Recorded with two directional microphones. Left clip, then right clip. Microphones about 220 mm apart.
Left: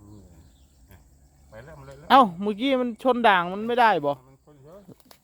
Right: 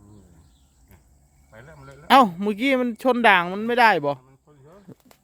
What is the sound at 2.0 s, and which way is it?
Speech, 25° right (ahead or behind).